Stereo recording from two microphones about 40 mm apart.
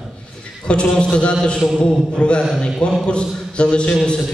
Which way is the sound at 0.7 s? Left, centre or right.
Left.